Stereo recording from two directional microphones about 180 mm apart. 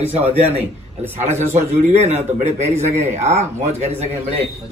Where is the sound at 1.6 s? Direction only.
35° right (ahead or behind).